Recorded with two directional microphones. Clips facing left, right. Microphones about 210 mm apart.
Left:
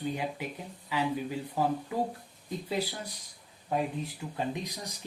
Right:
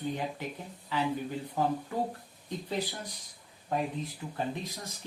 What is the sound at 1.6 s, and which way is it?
Speech, 10° left (ahead or behind).